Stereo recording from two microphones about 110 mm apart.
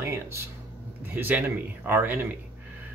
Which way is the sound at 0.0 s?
25° right (ahead or behind).